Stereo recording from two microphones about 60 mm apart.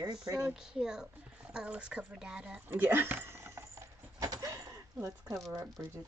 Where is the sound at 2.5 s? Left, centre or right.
Right.